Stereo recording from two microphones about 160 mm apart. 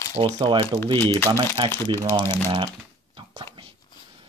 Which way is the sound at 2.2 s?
15° left (ahead or behind).